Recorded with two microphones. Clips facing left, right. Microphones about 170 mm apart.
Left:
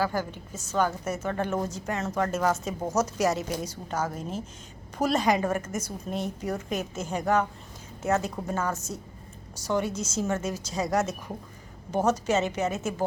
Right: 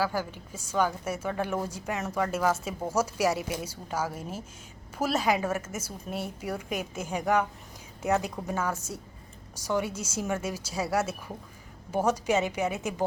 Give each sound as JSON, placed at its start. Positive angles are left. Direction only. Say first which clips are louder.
{"t": 0.0, "sound": "a woman's voice", "louder": "left 1 dB", "side_deg": -10}